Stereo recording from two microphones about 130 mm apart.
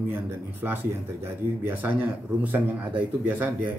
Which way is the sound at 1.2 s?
15° right (ahead or behind).